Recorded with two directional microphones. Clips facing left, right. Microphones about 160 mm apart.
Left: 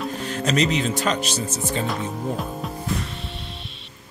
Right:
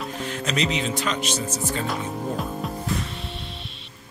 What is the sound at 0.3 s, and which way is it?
Speech, 40° left (ahead or behind).